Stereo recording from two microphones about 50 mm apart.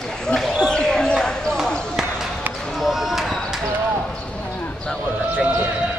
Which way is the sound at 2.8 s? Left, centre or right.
Centre.